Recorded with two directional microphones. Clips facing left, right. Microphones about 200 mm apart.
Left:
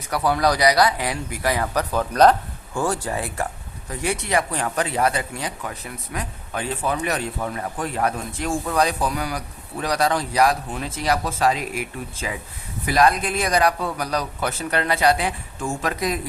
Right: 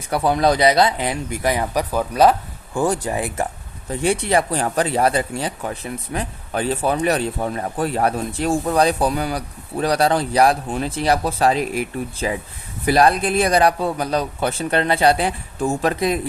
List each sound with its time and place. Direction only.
0.1 s speech: 25° right (ahead or behind)
3.8 s speech: 30° right (ahead or behind)